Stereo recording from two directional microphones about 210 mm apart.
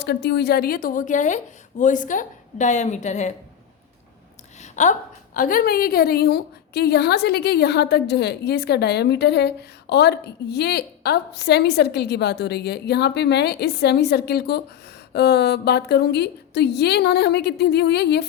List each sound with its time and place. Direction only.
0.0 s a woman's voice: 55° left (ahead or behind); by 3.3 s 35° left (ahead or behind)
4.6 s a woman's voice: 35° left (ahead or behind); by 18.3 s 50° left (ahead or behind)